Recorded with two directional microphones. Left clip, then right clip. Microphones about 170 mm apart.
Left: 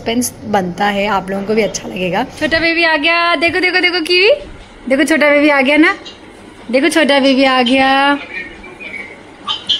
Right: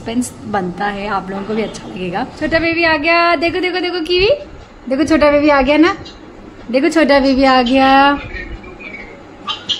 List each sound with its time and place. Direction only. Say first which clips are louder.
0.5 s a woman's voice: left 5 dB; 15° left (ahead or behind)